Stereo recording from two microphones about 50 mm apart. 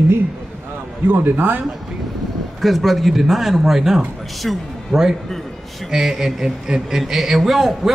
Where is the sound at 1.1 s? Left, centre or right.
Right.